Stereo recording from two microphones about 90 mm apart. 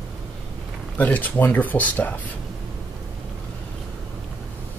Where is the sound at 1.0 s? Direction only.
20° left (ahead or behind).